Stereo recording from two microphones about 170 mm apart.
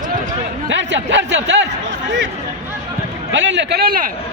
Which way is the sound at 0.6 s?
90° right.